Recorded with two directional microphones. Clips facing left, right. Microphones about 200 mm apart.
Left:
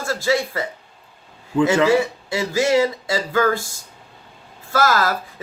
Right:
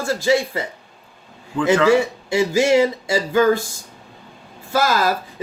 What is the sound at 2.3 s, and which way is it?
Speech, 15° right (ahead or behind).